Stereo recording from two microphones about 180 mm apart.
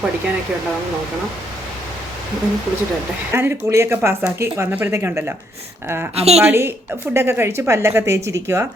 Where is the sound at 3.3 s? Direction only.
15° right (ahead or behind).